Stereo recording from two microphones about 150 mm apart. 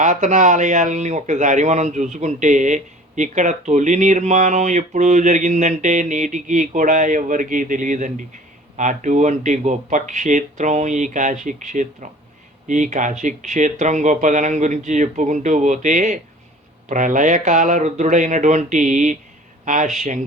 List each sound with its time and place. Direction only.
0.0 s a man's voice: 60° right (ahead or behind)